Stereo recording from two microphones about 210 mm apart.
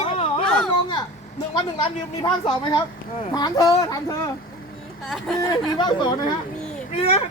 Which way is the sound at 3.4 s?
15° left (ahead or behind).